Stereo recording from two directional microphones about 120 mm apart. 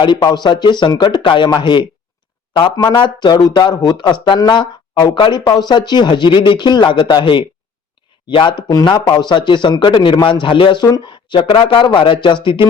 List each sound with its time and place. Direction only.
0.0 s speech: 35° left (ahead or behind)